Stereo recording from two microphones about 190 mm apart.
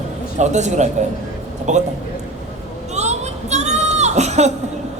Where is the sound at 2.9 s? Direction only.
35° right (ahead or behind).